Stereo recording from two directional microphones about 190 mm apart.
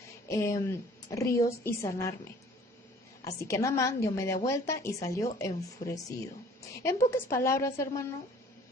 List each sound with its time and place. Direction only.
0.3 s a woman's voice: 15° left (ahead or behind)
3.2 s a woman's voice: 15° left (ahead or behind)